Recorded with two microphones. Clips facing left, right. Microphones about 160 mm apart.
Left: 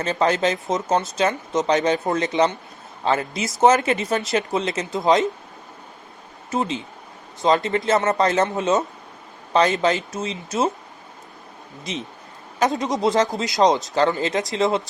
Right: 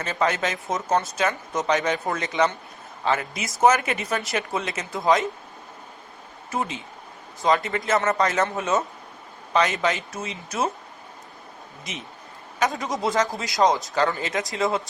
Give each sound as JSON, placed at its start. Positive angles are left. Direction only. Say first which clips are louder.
{"t": 0.0, "sound": "speech", "louder": "left 4 dB", "side_deg": 30}
{"t": 6.5, "sound": "speech", "louder": "left 4 dB", "side_deg": 25}
{"t": 12.5, "sound": "speech", "louder": "left 4 dB", "side_deg": 25}